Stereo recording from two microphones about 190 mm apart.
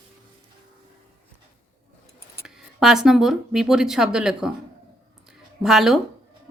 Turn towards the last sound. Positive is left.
turn(degrees=0)  # may be behind; listen again after turning